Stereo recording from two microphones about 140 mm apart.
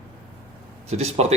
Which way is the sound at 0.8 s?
50° right (ahead or behind).